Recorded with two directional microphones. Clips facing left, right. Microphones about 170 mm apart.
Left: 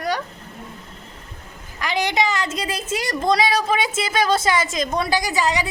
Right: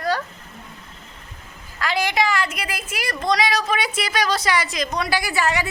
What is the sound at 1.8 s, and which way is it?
A woman's voice, 20° left (ahead or behind).